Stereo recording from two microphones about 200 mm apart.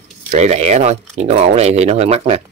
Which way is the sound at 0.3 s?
35° right (ahead or behind).